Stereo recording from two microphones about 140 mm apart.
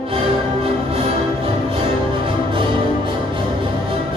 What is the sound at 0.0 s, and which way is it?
Music, 40° right (ahead or behind).